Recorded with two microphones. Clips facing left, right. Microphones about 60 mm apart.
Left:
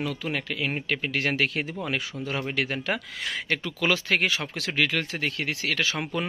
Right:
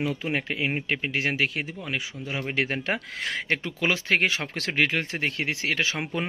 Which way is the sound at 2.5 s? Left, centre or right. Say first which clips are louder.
Right 3 dB; right.